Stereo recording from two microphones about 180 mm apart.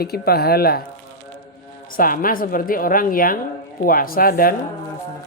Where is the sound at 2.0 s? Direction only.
50° left (ahead or behind).